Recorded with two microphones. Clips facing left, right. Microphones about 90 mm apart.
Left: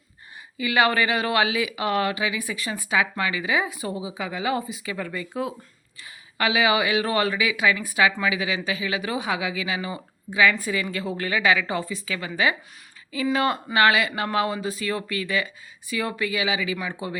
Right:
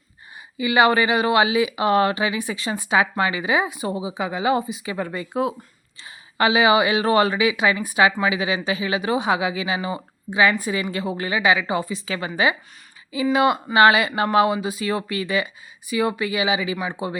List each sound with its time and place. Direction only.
0.5 s speech: 20° right (ahead or behind)
5.3 s speech: 60° right (ahead or behind)
6.0 s speech: 25° right (ahead or behind)